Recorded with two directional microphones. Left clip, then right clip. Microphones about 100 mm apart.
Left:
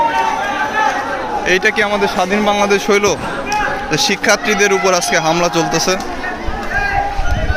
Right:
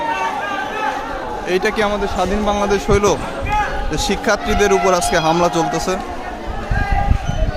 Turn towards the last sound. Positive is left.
turn(degrees=-25)  # may be behind; listen again after turning